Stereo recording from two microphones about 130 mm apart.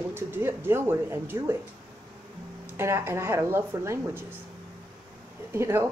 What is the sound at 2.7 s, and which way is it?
A woman's voice, 20° right (ahead or behind).